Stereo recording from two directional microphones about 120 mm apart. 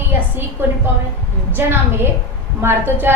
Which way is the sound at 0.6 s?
20° right (ahead or behind).